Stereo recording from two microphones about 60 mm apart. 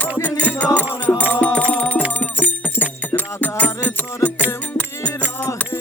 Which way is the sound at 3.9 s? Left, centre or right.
Left.